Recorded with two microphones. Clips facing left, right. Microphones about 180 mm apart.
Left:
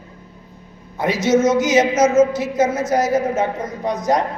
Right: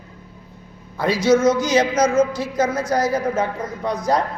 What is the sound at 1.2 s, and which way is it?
A woman's voice, 20° left (ahead or behind).